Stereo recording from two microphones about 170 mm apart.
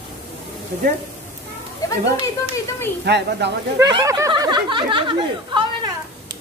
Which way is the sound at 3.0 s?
80° right.